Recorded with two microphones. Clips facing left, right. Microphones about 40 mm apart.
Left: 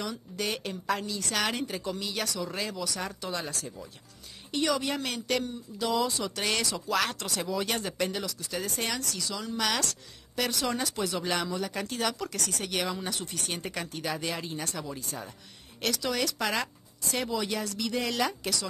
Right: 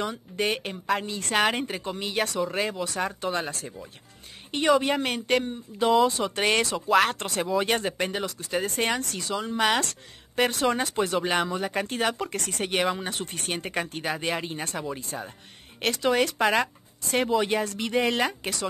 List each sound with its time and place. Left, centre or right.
0.0 s speech: right
16.4 s speech: right
17.1 s speech: right